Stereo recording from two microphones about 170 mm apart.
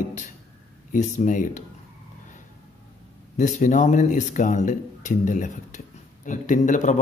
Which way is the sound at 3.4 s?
45° left (ahead or behind).